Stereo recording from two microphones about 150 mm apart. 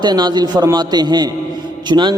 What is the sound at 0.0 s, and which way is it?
A man's voice, 25° right (ahead or behind).